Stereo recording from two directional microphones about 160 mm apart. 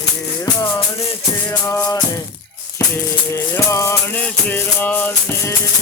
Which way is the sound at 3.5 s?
15° left (ahead or behind).